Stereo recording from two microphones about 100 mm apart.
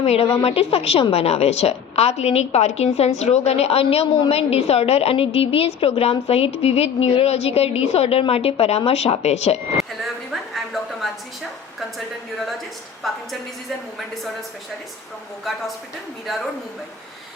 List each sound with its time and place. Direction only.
0.0 s a woman's voice: 90° left
0.4 s a woman's voice: 80° left
1.1 s a woman's voice: 90° left
9.7 s vehicle: centre (ahead or behind)
11.8 s a sound: centre (ahead or behind)
16.2 s speech: centre (ahead or behind)